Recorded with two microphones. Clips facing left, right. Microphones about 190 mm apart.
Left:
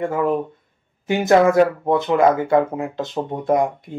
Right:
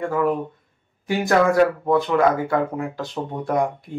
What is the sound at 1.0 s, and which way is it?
Speech, 20° left (ahead or behind).